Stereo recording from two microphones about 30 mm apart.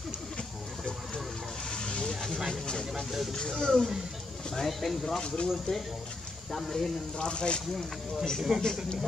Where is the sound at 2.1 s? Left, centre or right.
Centre.